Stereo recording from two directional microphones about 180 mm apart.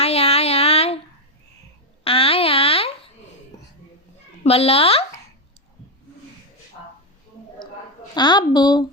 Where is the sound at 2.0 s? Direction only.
30° left (ahead or behind).